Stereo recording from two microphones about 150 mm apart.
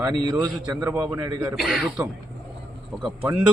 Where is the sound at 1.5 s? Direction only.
Centre (ahead or behind).